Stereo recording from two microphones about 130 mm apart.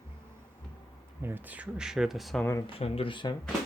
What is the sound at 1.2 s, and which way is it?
Speech, 15° right (ahead or behind).